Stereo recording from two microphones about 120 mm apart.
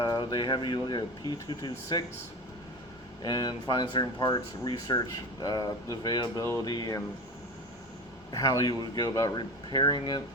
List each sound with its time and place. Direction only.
0.0 s speech: 40° left (ahead or behind)
3.2 s speech: 35° left (ahead or behind)
8.3 s speech: 25° left (ahead or behind)